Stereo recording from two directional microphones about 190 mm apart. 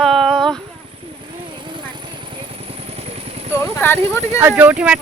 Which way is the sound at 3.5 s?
15° left (ahead or behind).